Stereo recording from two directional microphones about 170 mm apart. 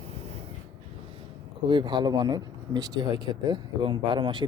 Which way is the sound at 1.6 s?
25° right (ahead or behind).